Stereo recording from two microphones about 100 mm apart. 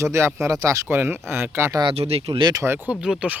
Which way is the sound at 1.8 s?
80° right.